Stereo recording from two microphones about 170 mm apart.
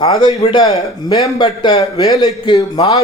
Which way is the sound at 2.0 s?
20° left (ahead or behind).